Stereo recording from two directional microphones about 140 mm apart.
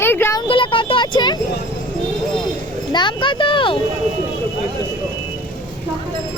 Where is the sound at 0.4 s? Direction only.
40° left (ahead or behind).